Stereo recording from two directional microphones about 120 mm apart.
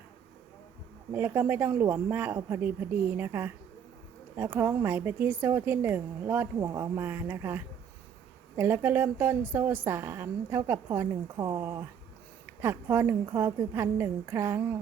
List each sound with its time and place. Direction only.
1.1 s a woman's voice: 15° right (ahead or behind)